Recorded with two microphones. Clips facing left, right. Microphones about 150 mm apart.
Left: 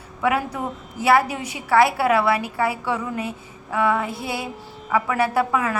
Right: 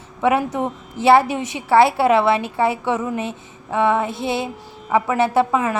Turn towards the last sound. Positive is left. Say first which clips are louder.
# right 3 dB
turn(degrees=-25)  # may be behind; listen again after turning